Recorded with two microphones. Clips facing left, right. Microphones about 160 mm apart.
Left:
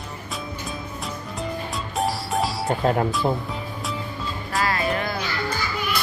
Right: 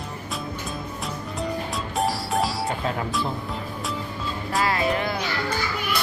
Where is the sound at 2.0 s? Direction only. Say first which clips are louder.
Even; centre (ahead or behind).